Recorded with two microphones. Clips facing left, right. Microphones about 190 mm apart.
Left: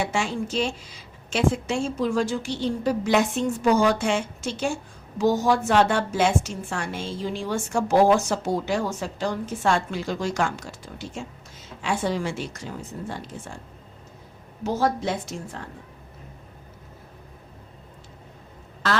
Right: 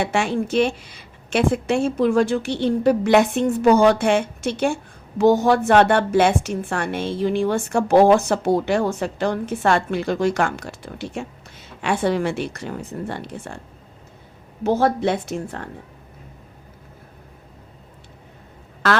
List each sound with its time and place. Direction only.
0.0 s a woman's voice: 60° right (ahead or behind)
14.6 s a woman's voice: 60° right (ahead or behind)